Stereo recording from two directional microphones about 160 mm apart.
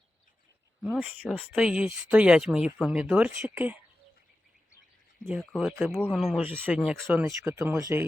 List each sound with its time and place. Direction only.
0.8 s speech: 5° right (ahead or behind)
5.2 s speech: centre (ahead or behind)
6.4 s speech: 10° right (ahead or behind)
6.7 s speech: centre (ahead or behind)
7.4 s speech: 20° right (ahead or behind)